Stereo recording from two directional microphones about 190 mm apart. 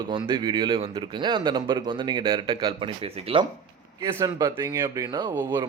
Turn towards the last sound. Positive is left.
turn(degrees=-20)  # may be behind; listen again after turning